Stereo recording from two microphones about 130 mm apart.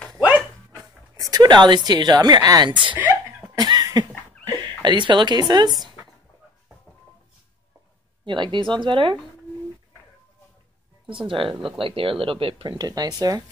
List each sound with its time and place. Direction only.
1.3 s speech: 35° right (ahead or behind)
3.5 s cough: 30° right (ahead or behind)
4.5 s speech: 35° right (ahead or behind)
8.3 s speech: 40° right (ahead or behind)
11.2 s speech: 40° right (ahead or behind)
12.7 s speech: 30° right (ahead or behind)